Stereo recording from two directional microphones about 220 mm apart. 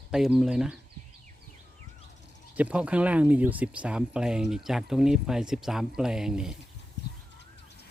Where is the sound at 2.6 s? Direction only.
5° right (ahead or behind).